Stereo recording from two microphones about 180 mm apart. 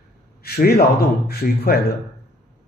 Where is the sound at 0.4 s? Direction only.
60° left (ahead or behind).